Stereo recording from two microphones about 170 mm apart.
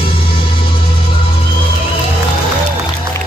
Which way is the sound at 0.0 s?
30° left (ahead or behind).